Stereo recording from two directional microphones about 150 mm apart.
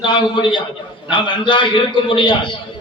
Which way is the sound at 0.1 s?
30° left (ahead or behind).